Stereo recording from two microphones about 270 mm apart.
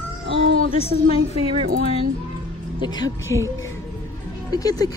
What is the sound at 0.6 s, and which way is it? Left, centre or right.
Speech, left.